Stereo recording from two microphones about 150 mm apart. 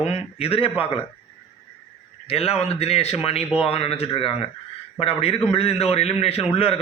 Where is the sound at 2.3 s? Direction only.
40° left (ahead or behind).